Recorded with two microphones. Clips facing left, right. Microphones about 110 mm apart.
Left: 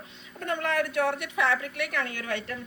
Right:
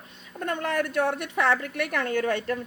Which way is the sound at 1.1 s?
50° right (ahead or behind).